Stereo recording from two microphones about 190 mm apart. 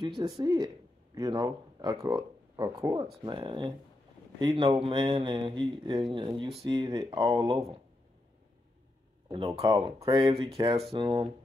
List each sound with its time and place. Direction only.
0.2 s speech: 20° right (ahead or behind)
9.5 s speech: 20° right (ahead or behind)
9.8 s speech: 30° right (ahead or behind)